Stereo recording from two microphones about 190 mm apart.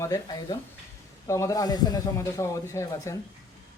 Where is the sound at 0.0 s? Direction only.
20° left (ahead or behind).